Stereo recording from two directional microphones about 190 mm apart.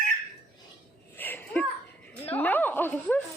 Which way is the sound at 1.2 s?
10° left (ahead or behind).